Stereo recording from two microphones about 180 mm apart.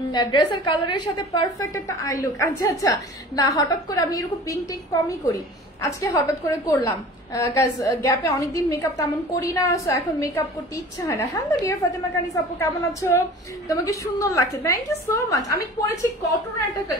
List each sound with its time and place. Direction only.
0.1 s a woman's voice: 25° left (ahead or behind)
5.8 s a woman's voice: 15° left (ahead or behind)